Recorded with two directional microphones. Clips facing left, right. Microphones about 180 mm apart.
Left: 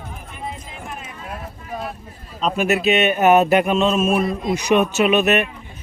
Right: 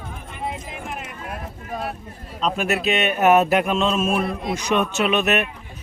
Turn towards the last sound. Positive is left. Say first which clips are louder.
# left 4 dB
turn(degrees=0)  # may be behind; listen again after turning